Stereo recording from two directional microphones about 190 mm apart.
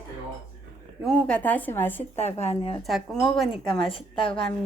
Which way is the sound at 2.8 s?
Centre (ahead or behind).